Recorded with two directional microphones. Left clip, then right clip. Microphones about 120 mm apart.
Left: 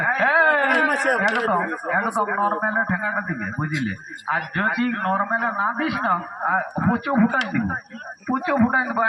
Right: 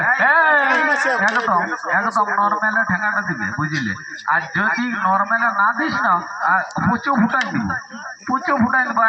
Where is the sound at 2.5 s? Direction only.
25° left (ahead or behind).